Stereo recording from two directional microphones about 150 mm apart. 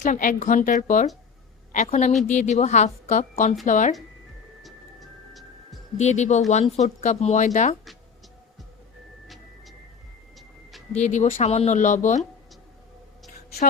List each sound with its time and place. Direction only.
0.0 s a woman's voice: 60° left (ahead or behind)
4.6 s music: centre (ahead or behind)
6.0 s speech: 50° left (ahead or behind)
9.2 s music: centre (ahead or behind)
10.3 s a sound: centre (ahead or behind)
10.9 s speech: 50° left (ahead or behind)